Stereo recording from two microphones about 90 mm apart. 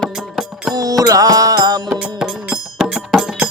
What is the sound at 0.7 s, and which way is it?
Music, 40° right (ahead or behind).